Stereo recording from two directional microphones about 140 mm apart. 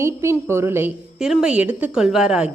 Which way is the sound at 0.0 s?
20° right (ahead or behind).